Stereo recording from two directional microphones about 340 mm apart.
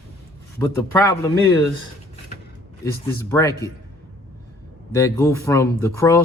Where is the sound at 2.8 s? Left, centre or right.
Centre.